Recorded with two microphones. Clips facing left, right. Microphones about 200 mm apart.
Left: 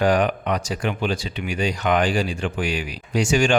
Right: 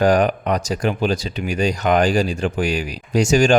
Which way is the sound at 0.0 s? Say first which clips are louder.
Right 3 dB; 40° right (ahead or behind).